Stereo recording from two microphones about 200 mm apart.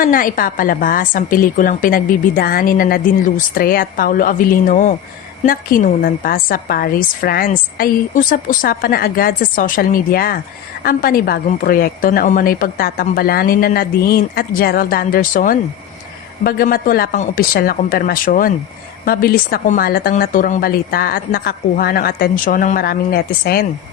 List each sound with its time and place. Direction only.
0.0 s a woman's voice: 45° left (ahead or behind)